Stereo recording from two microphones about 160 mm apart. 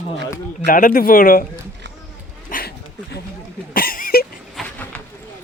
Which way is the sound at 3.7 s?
65° left (ahead or behind).